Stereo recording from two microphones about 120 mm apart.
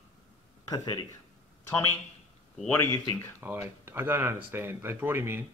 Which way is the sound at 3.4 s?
20° right (ahead or behind).